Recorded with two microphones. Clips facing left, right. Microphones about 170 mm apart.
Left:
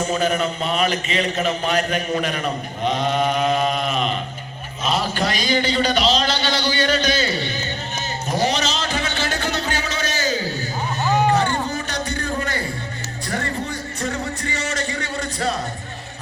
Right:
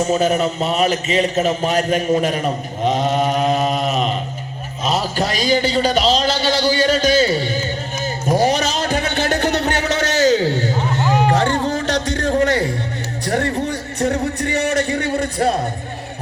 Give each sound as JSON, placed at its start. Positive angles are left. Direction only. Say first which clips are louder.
{"t": 0.0, "sound": "a man's voice", "louder": "right 4 dB", "side_deg": -40}
{"t": 8.4, "sound": "a sound", "louder": "right 5 dB", "side_deg": -55}
{"t": 11.3, "sound": "music", "louder": "right 4 dB", "side_deg": -90}
{"t": 13.2, "sound": "music", "louder": "right 7 dB", "side_deg": -65}
{"t": 14.4, "sound": "a man's voice", "louder": "right 8 dB", "side_deg": -60}